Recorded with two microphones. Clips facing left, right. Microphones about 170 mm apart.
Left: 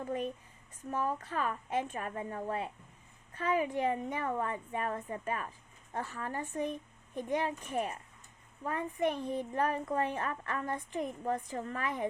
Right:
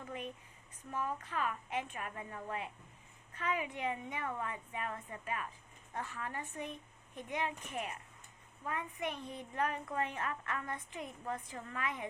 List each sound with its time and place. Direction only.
0.0 s a woman's voice: 40° left (ahead or behind)